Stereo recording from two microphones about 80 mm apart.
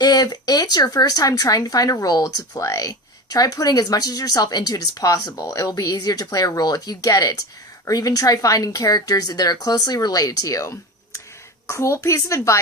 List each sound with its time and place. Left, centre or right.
0.0 s speech: left